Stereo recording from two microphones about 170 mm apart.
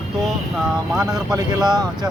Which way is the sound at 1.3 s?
25° right (ahead or behind).